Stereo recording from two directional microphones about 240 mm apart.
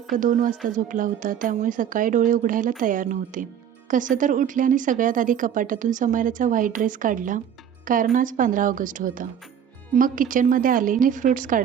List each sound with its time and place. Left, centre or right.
0.1 s a woman's voice: right